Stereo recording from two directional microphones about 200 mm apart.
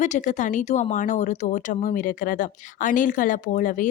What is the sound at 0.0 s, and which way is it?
Speech, 35° left (ahead or behind).